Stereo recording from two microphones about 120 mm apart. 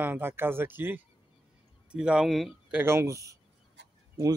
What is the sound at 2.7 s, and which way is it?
Speech, 20° right (ahead or behind).